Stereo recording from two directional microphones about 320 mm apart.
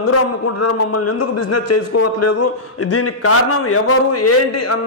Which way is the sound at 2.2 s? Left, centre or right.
Left.